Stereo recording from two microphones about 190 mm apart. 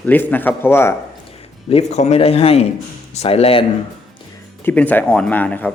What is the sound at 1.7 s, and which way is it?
Speech, 35° left (ahead or behind).